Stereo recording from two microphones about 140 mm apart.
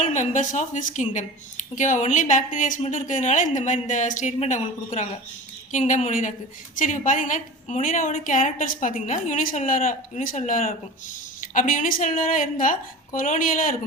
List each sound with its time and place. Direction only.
0.0 s a woman's voice: 65° left (ahead or behind)